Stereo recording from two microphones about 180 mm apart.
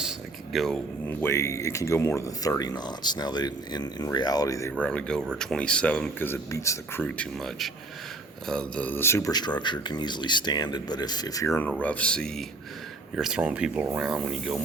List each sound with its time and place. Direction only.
0.0 s a sound: centre (ahead or behind)
1.2 s speech: 15° left (ahead or behind)
4.9 s speech: 5° left (ahead or behind)